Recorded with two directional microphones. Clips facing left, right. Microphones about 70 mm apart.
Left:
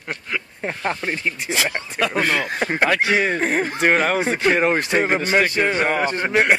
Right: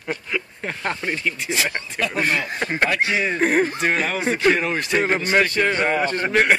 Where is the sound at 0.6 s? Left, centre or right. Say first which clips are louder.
Left 2 dB; centre.